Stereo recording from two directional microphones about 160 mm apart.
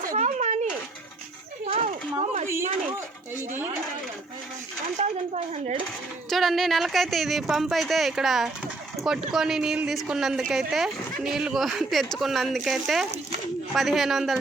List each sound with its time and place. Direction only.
0.1 s a sound: 50° right (ahead or behind)
4.9 s speech: 45° right (ahead or behind)
6.3 s speech: centre (ahead or behind)